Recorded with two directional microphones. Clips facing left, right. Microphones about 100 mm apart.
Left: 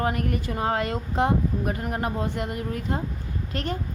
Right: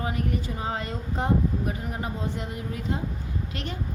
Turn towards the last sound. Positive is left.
turn(degrees=45)  # may be behind; listen again after turning